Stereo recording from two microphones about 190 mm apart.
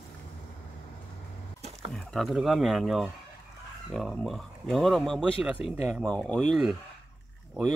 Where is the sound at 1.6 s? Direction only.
35° right (ahead or behind).